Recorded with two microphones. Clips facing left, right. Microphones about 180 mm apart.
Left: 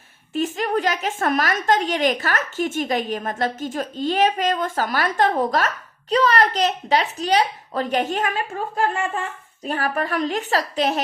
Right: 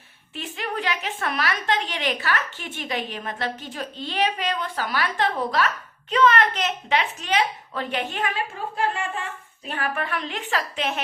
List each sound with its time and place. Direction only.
0.3 s a woman's voice: 45° left (ahead or behind)